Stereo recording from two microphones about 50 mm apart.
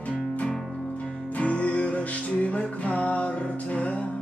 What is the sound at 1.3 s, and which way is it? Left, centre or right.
Music, left.